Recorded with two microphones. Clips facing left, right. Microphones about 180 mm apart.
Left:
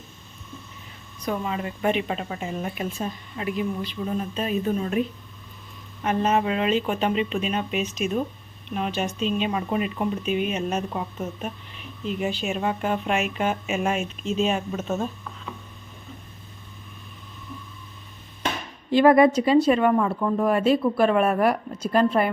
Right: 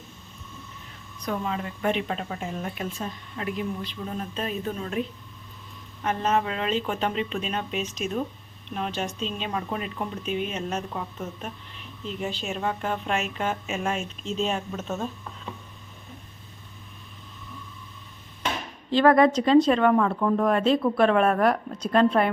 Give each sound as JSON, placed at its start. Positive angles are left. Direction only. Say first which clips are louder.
{"t": 1.2, "sound": "speech", "louder": "left 2 dB", "side_deg": 10}
{"t": 18.9, "sound": "speech", "louder": "left 2 dB", "side_deg": 10}